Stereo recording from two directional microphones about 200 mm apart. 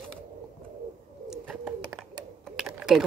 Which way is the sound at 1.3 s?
Centre (ahead or behind).